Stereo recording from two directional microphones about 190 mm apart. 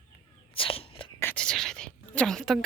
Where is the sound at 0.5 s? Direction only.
30° left (ahead or behind).